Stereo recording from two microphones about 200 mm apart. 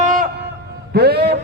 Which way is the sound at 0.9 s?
55° right (ahead or behind).